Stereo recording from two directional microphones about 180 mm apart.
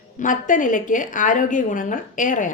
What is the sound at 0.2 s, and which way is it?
Speech, 45° left (ahead or behind).